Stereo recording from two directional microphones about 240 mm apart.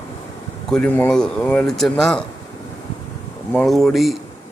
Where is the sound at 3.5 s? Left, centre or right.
Centre.